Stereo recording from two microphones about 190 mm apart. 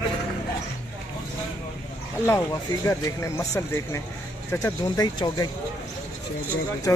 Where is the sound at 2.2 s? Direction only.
15° left (ahead or behind).